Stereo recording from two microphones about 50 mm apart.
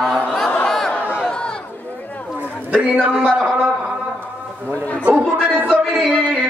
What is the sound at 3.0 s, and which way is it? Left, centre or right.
Speech, right.